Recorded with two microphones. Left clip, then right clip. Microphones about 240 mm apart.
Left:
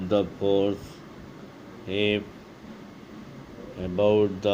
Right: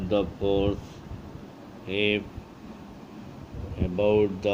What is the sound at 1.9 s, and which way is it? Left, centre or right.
Speech, left.